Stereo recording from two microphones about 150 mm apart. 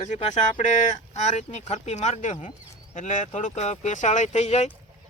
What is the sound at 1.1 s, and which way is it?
Speech, 50° left (ahead or behind).